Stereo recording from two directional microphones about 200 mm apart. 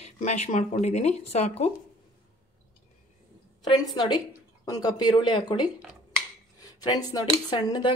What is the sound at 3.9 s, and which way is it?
Speech, 20° left (ahead or behind).